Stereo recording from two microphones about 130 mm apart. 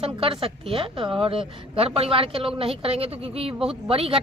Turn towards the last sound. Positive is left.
turn(degrees=-45)  # may be behind; listen again after turning